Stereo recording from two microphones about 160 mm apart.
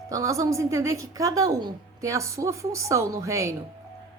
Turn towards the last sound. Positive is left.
turn(degrees=-20)  # may be behind; listen again after turning